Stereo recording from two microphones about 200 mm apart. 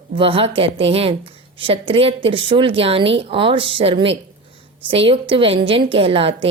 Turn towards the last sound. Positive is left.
turn(degrees=-30)  # may be behind; listen again after turning